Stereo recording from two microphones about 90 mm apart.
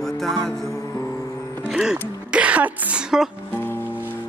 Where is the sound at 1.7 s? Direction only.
5° right (ahead or behind).